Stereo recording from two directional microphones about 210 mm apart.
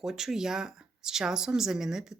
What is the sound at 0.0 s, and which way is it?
Speech, centre (ahead or behind).